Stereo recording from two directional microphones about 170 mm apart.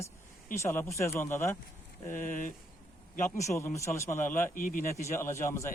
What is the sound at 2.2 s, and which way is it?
Speech, 50° left (ahead or behind).